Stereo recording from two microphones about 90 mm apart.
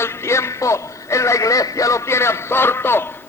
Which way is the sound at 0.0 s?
30° left (ahead or behind).